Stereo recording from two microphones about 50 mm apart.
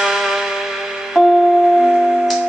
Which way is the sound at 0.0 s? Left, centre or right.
Centre.